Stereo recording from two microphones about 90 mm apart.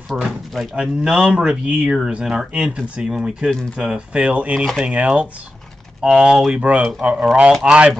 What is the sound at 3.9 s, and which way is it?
Speech, 10° right (ahead or behind).